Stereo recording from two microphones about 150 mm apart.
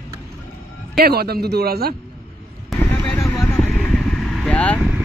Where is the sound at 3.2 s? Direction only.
20° left (ahead or behind).